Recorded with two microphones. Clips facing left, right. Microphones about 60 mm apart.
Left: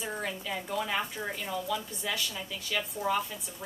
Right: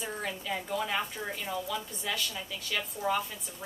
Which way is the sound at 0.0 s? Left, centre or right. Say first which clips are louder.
Left 1 dB; centre.